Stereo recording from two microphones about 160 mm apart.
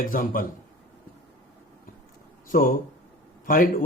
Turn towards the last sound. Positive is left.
turn(degrees=60)  # may be behind; listen again after turning